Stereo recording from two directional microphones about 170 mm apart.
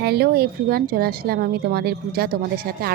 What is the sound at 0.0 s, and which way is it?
Speech, 65° right (ahead or behind).